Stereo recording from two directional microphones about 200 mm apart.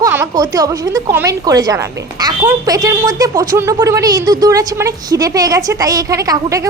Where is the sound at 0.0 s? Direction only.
15° right (ahead or behind).